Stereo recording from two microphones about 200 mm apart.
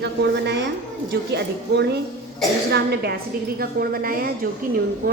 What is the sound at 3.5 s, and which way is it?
Speech, 45° right (ahead or behind).